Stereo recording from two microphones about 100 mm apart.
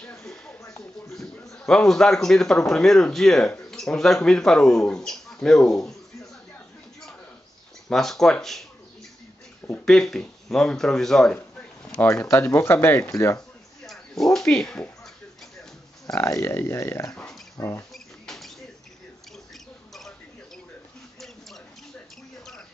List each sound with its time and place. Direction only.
0.2 s a sound: 10° left (ahead or behind)
1.5 s speech: 5° left (ahead or behind)
7.9 s speech: 5° left (ahead or behind)
9.8 s speech: 5° left (ahead or behind)
11.3 s a sound: 15° left (ahead or behind)
12.1 s speech: 25° left (ahead or behind)
13.8 s speech: 5° left (ahead or behind)
16.2 s speech: 30° left (ahead or behind)
17.1 s a sound: 10° left (ahead or behind)
17.6 s speech: 30° left (ahead or behind)
17.9 s rodents: centre (ahead or behind)
19.5 s rodents: centre (ahead or behind)